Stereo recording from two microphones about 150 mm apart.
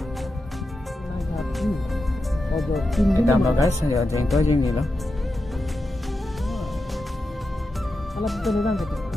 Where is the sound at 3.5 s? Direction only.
20° left (ahead or behind).